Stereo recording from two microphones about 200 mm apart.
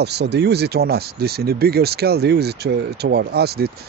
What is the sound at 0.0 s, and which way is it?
Speech, 55° right (ahead or behind).